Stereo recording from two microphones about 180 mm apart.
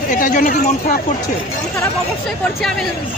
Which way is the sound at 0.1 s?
50° left (ahead or behind).